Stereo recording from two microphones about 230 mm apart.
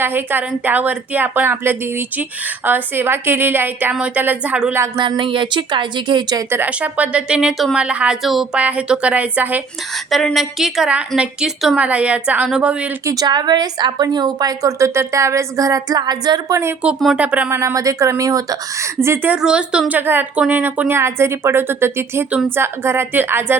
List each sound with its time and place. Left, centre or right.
0.0 s a woman's voice: centre
13.1 s a woman's voice: centre